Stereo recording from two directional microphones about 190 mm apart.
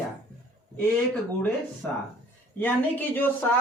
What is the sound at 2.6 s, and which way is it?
Speech, 10° left (ahead or behind).